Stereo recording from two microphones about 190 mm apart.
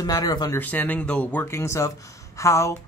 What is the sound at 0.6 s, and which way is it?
Speech, 10° left (ahead or behind).